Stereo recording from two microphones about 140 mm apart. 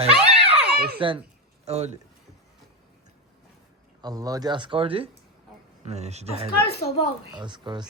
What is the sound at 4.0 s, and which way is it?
Speech, 25° right (ahead or behind).